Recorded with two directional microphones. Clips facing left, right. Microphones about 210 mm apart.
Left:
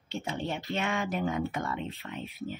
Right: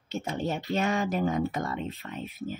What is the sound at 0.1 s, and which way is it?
A woman's voice, 45° right (ahead or behind).